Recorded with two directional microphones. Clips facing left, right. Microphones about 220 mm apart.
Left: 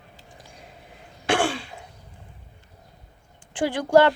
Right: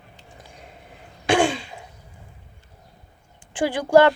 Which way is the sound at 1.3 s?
15° right (ahead or behind).